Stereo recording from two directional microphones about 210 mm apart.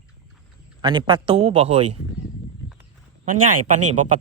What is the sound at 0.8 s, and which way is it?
A man's voice, 25° right (ahead or behind).